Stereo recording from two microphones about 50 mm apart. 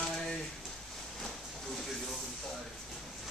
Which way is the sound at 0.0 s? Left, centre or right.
Centre.